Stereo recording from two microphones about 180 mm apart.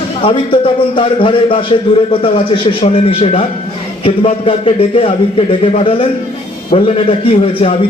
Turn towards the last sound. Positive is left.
turn(degrees=35)  # may be behind; listen again after turning